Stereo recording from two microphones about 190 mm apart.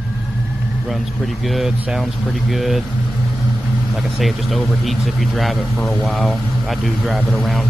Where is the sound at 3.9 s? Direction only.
Centre (ahead or behind).